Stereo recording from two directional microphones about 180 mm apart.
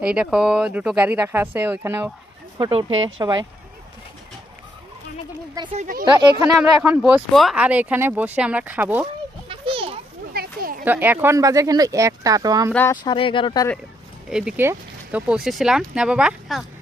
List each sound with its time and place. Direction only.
0.0 s speech: 5° right (ahead or behind)
2.6 s speech: 30° right (ahead or behind)
5.7 s speech: 45° right (ahead or behind)
6.4 s speech: 5° right (ahead or behind)
9.5 s children playing: 30° right (ahead or behind)
10.3 s children playing: 55° right (ahead or behind)
10.8 s speech: 10° right (ahead or behind)
12.9 s speech: 25° left (ahead or behind)
14.3 s speech: 5° right (ahead or behind)